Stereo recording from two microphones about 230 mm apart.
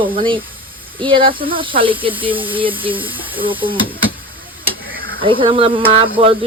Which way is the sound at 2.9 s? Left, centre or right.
Centre.